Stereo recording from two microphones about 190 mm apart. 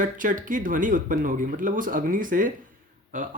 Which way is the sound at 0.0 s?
45° right (ahead or behind).